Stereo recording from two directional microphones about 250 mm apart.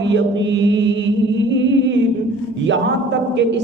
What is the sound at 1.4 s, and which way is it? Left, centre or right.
Humming, right.